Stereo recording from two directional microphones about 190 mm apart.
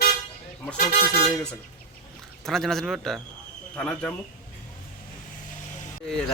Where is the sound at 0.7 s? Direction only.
50° left (ahead or behind).